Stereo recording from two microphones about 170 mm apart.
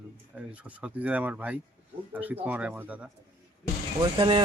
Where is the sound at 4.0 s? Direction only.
25° right (ahead or behind).